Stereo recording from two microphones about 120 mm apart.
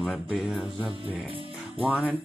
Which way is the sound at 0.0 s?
5° right (ahead or behind).